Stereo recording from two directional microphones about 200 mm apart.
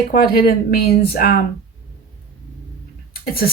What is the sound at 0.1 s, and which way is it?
Speech, 45° left (ahead or behind).